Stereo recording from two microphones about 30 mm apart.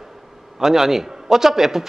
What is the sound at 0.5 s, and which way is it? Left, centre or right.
A man's voice, centre.